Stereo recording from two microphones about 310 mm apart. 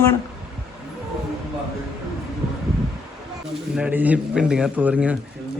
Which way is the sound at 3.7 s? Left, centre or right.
Centre.